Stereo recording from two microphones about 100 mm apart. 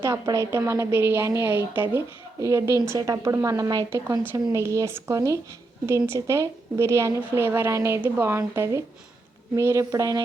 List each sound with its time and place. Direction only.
0.0 s a woman's voice: 30° right (ahead or behind)
2.4 s a woman's voice: 30° right (ahead or behind)
4.2 s a woman's voice: 25° right (ahead or behind)